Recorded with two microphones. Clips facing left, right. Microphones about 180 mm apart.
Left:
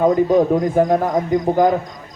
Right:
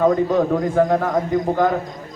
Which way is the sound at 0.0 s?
20° left (ahead or behind).